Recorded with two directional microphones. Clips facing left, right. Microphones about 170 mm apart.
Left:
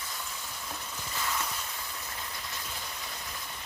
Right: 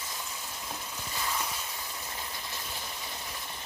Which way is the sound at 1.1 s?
15° right (ahead or behind).